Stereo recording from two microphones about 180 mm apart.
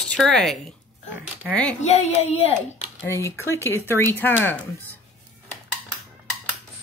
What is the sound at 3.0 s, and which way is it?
Speech, 15° left (ahead or behind).